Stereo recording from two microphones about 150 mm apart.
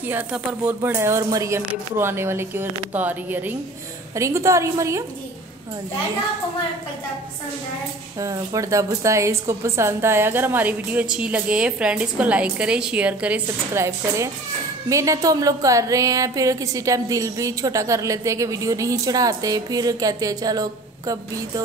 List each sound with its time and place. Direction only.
0.0 s a woman's voice: 15° right (ahead or behind)
0.9 s a woman's voice: 20° right (ahead or behind)
8.2 s a woman's voice: 20° right (ahead or behind)
13.8 s a woman's voice: 20° right (ahead or behind)